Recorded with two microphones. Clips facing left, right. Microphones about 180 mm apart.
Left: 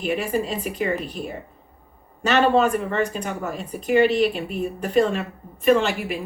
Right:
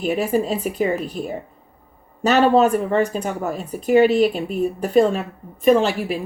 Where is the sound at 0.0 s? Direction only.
40° right (ahead or behind).